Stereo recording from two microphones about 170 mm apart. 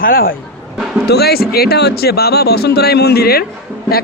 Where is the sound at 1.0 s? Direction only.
70° left (ahead or behind).